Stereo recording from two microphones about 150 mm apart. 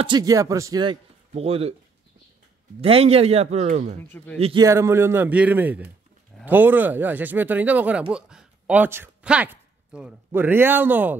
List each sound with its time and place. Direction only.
0.0 s speech: 25° right (ahead or behind)
1.3 s a man's voice: 40° right (ahead or behind)
2.8 s a man's voice: 40° right (ahead or behind)
4.0 s a man's voice: 15° left (ahead or behind)
4.6 s speech: 20° right (ahead or behind)